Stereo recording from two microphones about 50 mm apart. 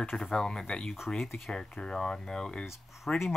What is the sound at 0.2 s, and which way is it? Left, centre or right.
Speech, centre.